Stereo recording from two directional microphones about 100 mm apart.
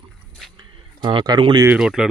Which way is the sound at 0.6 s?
50° right (ahead or behind).